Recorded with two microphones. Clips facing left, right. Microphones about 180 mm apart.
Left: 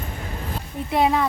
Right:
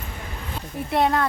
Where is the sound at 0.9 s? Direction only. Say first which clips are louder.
Left 1 dB; centre (ahead or behind).